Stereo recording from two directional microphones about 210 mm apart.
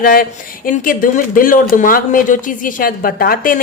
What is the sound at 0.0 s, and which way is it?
A woman's voice, 40° left (ahead or behind).